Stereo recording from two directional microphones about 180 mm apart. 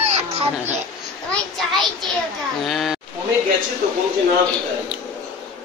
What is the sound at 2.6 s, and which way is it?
Speech, centre (ahead or behind).